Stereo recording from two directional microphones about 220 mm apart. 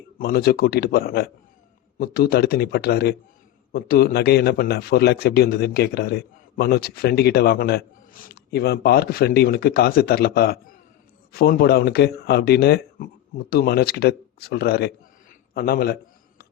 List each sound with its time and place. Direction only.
0.2 s a man's voice: 45° left (ahead or behind)